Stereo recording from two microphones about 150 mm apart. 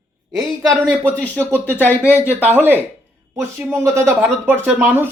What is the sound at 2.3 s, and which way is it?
Speech, 10° right (ahead or behind).